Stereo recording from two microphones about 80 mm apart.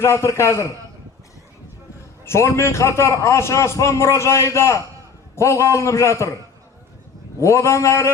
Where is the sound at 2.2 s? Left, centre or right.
Left.